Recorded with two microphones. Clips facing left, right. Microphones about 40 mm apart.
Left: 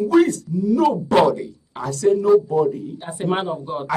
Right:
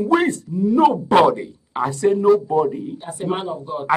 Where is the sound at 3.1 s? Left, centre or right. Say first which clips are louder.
Left 2 dB; left.